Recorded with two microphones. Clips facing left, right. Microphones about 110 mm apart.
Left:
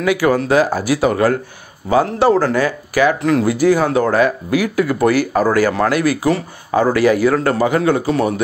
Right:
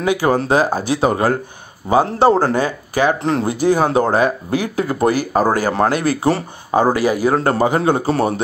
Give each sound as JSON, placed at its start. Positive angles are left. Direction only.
{"t": 0.0, "sound": "speech", "side_deg": -25}
{"t": 7.3, "sound": "speech", "side_deg": -30}